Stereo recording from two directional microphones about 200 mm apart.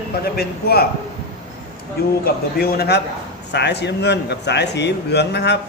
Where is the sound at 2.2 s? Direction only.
50° left (ahead or behind).